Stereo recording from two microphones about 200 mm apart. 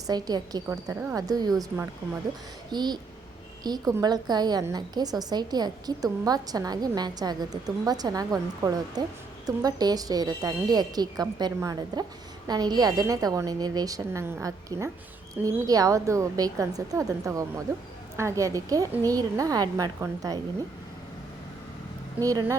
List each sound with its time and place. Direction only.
0.1 s a woman's voice: 20° right (ahead or behind)
22.2 s a woman's voice: 15° right (ahead or behind)